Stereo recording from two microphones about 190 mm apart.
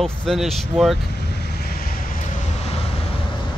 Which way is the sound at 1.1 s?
60° left (ahead or behind).